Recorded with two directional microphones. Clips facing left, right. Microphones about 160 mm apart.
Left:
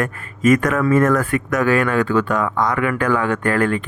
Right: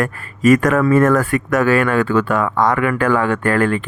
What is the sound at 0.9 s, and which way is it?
Speech, 50° right (ahead or behind).